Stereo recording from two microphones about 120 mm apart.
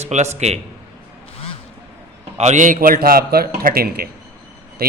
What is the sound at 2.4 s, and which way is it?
Speech, 85° right.